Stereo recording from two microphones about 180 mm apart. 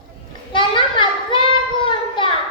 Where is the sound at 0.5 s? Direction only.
25° left (ahead or behind).